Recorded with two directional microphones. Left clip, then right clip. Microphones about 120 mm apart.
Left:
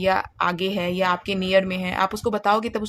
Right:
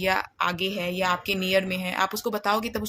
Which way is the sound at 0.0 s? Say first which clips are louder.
Left 3 dB; 30° left (ahead or behind).